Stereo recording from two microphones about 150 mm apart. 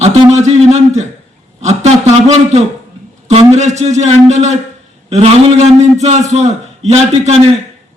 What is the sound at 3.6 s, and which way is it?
A man's voice, 50° right (ahead or behind).